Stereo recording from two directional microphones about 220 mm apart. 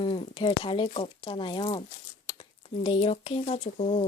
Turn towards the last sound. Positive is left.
turn(degrees=25)  # may be behind; listen again after turning